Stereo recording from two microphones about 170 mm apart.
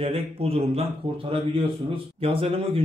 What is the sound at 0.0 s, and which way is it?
Speech, 35° right (ahead or behind).